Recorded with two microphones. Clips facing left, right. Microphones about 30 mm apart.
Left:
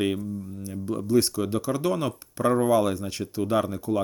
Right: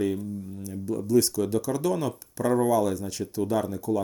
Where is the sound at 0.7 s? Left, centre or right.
Left.